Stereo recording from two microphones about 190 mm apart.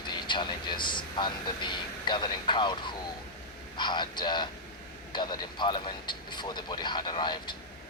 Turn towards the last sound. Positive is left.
turn(degrees=25)  # may be behind; listen again after turning